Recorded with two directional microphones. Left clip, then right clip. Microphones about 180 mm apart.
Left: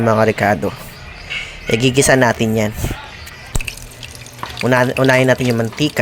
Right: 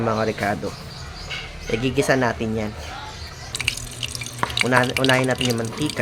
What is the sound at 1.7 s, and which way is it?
Speech, 35° left (ahead or behind).